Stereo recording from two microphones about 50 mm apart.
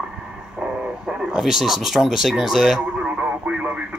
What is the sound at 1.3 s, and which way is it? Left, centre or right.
Speech, centre.